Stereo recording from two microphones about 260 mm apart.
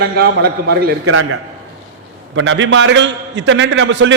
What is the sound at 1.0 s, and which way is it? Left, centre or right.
A man's voice, right.